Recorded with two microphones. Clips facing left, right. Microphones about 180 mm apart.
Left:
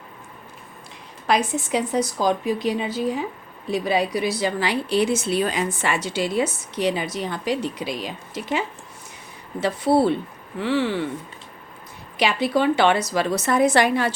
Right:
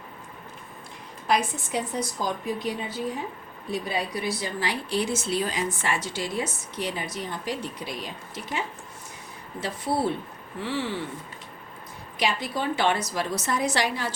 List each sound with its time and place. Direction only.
1.3 s a woman's voice: 90° left
9.6 s a woman's voice: 75° left (ahead or behind)
12.2 s a woman's voice: 80° left; by 14.1 s 55° left (ahead or behind)